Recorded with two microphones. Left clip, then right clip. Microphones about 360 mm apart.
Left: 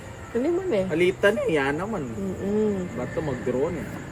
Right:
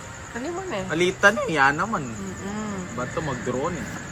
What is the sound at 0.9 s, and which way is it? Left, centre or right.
Speech, right.